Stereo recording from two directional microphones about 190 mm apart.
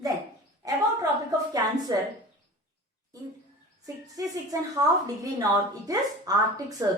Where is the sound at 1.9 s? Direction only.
20° right (ahead or behind).